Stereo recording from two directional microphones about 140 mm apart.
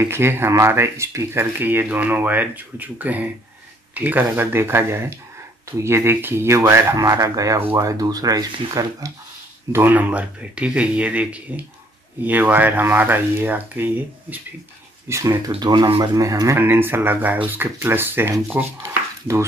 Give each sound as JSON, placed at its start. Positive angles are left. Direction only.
{"t": 0.0, "sound": "speech", "side_deg": -15}
{"t": 9.7, "sound": "speech", "side_deg": -15}